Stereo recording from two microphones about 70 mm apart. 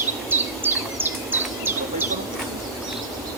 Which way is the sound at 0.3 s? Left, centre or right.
Right.